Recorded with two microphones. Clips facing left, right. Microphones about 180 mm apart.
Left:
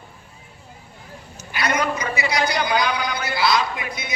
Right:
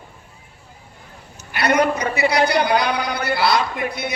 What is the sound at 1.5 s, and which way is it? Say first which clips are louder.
A man's voice: right 5 dB; 60° right (ahead or behind).